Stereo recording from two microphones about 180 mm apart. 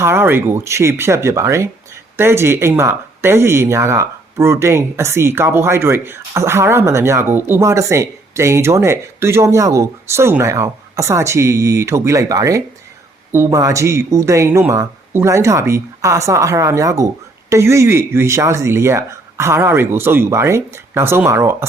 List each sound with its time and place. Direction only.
0.0 s speech: 15° right (ahead or behind)